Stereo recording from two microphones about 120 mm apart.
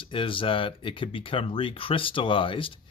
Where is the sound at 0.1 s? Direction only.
45° left (ahead or behind).